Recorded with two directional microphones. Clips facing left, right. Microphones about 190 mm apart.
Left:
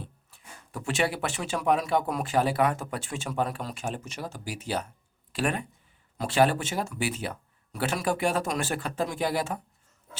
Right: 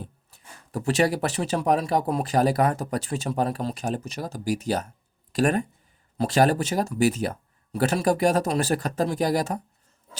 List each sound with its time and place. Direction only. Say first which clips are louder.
0.0 s speech: right 3 dB; 40° right (ahead or behind)